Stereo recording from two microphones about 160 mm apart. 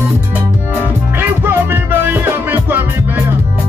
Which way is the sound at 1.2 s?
15° right (ahead or behind).